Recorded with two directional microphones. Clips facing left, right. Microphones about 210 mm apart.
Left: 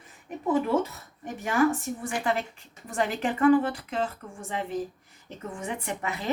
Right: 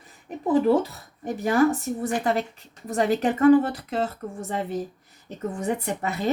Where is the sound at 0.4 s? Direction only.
35° right (ahead or behind).